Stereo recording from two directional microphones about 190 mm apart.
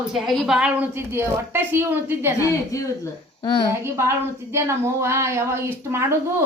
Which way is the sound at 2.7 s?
15° left (ahead or behind).